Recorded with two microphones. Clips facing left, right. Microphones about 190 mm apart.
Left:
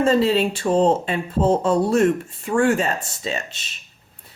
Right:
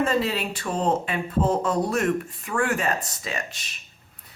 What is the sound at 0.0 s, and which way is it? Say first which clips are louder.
Speech: left 7 dB; 30° left (ahead or behind).